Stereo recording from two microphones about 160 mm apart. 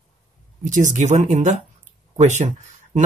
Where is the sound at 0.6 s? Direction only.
50° right (ahead or behind).